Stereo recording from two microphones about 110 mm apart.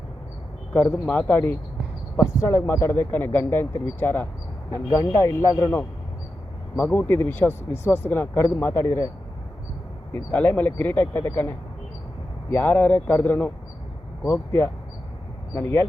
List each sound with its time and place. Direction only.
1.3 s speech: 20° left (ahead or behind)
10.1 s speech: 15° left (ahead or behind)